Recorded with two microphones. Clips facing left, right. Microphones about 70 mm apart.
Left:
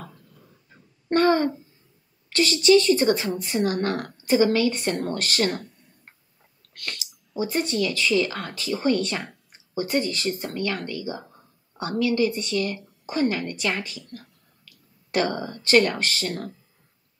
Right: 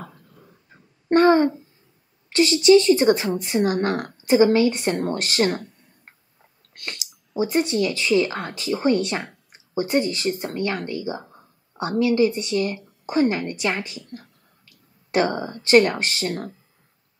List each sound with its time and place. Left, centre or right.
1.0 s a sound: right
2.2 s a woman's voice: right
6.7 s speech: right